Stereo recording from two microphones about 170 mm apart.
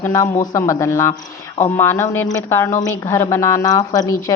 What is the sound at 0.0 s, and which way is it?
A woman's voice, 15° left (ahead or behind).